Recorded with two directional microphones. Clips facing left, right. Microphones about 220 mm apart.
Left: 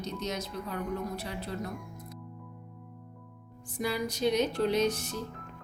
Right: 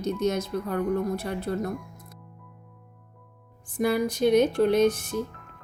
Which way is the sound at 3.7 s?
55° right (ahead or behind).